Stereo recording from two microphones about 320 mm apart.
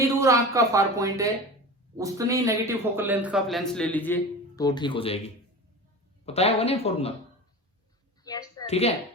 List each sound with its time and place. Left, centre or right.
0.2 s a man's voice: centre
6.2 s speech: centre
8.2 s a sound: centre